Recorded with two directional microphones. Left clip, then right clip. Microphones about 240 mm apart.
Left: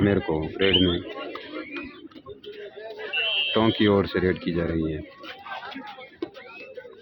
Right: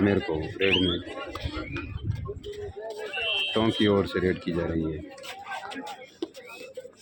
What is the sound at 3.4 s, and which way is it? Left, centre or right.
Fire alarm, centre.